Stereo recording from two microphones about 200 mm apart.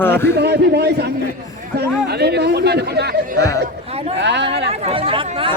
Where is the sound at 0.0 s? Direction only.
10° left (ahead or behind).